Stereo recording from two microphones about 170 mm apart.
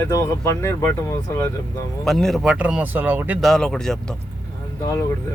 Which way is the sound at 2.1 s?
Centre (ahead or behind).